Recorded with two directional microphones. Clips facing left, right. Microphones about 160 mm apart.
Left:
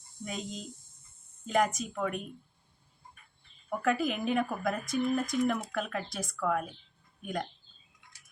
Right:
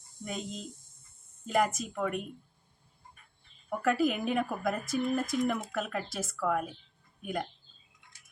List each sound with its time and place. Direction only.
0.3 s speech: centre (ahead or behind)
3.7 s speech: centre (ahead or behind)